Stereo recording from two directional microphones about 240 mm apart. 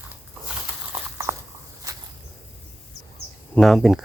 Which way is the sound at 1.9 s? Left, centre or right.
Centre.